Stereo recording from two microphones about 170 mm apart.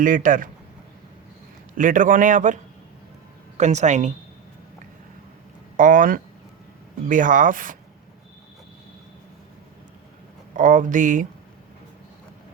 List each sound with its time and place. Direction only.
0.0 s a man's voice: 50° right (ahead or behind)
1.7 s a man's voice: 50° right (ahead or behind)
3.6 s a man's voice: 45° right (ahead or behind)
5.7 s a man's voice: 50° right (ahead or behind)
10.5 s a man's voice: 50° right (ahead or behind)